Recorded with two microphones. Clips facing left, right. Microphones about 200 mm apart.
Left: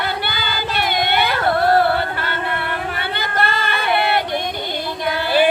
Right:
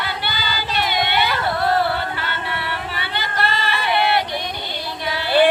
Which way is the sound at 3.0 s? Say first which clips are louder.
Left 1 dB; 50° left (ahead or behind).